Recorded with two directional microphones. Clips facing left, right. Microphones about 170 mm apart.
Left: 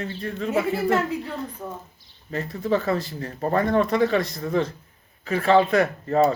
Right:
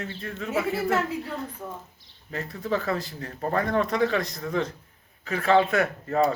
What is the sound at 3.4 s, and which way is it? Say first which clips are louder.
Speech: left 4 dB; 25° left (ahead or behind).